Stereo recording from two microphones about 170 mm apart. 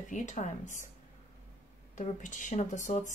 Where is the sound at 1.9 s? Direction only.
45° left (ahead or behind).